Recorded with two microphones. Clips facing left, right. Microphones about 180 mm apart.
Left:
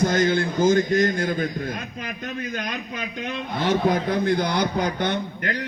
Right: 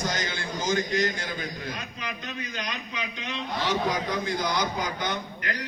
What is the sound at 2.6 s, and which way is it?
A man's voice, 50° left (ahead or behind).